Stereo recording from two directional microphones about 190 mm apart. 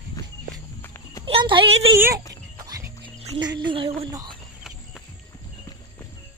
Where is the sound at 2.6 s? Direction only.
20° right (ahead or behind).